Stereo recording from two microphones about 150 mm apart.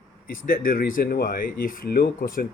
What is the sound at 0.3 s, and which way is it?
Speech, 70° left (ahead or behind).